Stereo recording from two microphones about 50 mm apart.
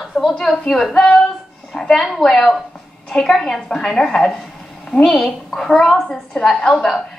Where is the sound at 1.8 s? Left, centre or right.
Centre.